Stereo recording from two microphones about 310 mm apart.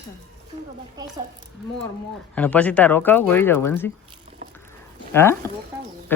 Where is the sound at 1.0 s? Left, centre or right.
Centre.